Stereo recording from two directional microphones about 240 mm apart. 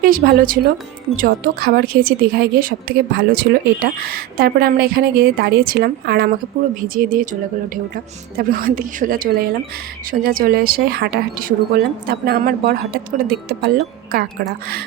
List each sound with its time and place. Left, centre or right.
0.0 s a woman's voice: right
8.4 s a woman's voice: right